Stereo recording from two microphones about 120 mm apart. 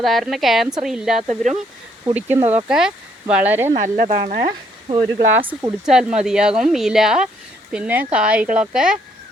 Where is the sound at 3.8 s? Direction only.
90° right.